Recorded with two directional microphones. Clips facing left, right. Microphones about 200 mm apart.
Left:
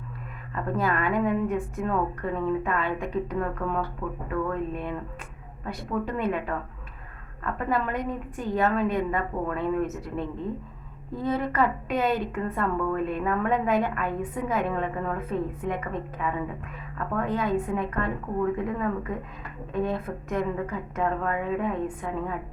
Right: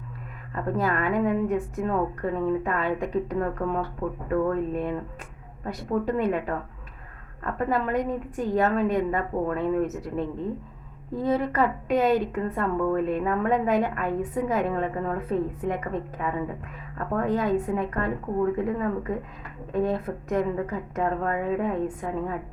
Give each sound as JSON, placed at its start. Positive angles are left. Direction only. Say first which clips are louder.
{"t": 0.5, "sound": "a woman's voice", "louder": "right 1 dB", "side_deg": -40}